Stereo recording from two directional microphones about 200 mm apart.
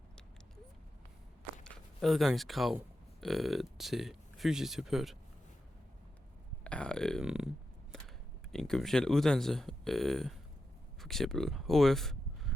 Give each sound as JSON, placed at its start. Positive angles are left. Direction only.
{"t": 1.6, "sound": "speech", "side_deg": 5}
{"t": 6.7, "sound": "speech", "side_deg": 5}
{"t": 8.5, "sound": "speech", "side_deg": 0}